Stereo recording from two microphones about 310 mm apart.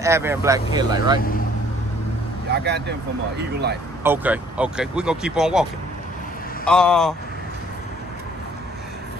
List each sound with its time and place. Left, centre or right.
0.0 s speech: centre
2.6 s speech: right
4.0 s speech: centre